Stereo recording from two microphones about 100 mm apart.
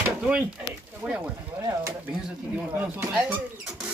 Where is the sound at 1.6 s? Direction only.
35° right (ahead or behind).